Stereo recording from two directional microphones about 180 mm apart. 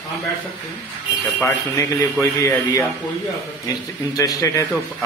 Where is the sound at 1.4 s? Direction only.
15° left (ahead or behind).